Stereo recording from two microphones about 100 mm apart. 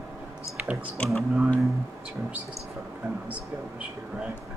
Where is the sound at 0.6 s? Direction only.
15° right (ahead or behind).